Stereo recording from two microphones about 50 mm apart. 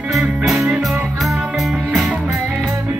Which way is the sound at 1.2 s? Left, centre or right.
Centre.